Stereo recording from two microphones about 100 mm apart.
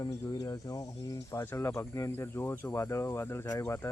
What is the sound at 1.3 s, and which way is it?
Speech, 25° left (ahead or behind).